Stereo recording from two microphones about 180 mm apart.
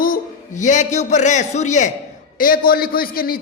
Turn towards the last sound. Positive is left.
turn(degrees=55)  # may be behind; listen again after turning